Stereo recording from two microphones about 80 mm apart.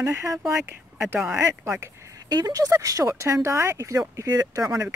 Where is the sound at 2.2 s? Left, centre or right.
Right.